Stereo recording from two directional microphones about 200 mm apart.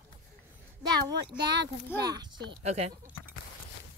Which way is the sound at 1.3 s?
55° right (ahead or behind).